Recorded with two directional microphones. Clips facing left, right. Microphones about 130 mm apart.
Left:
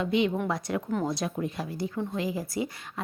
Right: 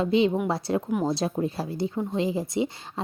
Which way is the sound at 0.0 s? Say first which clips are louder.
Right 4 dB; 30° right (ahead or behind).